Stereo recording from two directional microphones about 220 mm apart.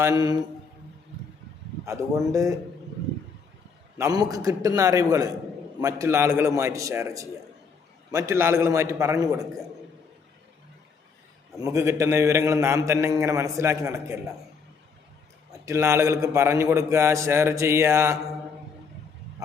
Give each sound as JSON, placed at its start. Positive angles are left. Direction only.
{"t": 0.0, "sound": "a man's voice", "side_deg": -15}
{"t": 2.3, "sound": "a man's voice", "side_deg": -15}
{"t": 3.9, "sound": "a man's voice", "side_deg": -15}
{"t": 11.5, "sound": "a man's voice", "side_deg": -15}
{"t": 15.6, "sound": "a man's voice", "side_deg": -15}